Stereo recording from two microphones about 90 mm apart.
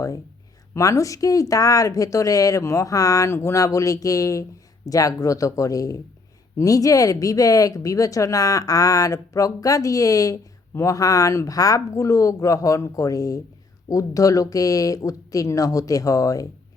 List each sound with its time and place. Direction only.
0.7 s speech: 35° left (ahead or behind)